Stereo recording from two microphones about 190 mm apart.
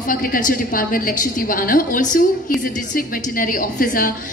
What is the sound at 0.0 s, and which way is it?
A woman's voice, 45° left (ahead or behind).